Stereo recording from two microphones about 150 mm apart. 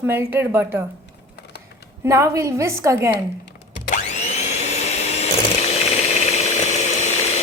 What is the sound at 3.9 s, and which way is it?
Vacuum cleaner, 50° left (ahead or behind).